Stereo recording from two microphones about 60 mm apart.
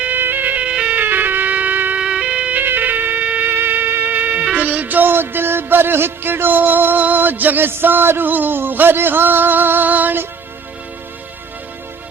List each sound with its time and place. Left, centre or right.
0.0 s music: right
0.7 s music: centre
0.9 s music: right
2.0 s music: centre
2.6 s music: right